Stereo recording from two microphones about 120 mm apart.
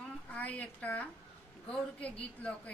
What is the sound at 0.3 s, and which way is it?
A woman's voice, 15° left (ahead or behind).